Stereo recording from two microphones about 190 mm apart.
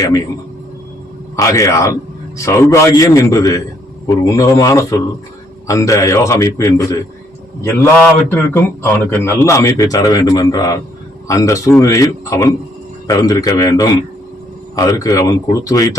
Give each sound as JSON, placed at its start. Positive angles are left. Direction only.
{"t": 1.4, "sound": "a man's voice", "side_deg": 15}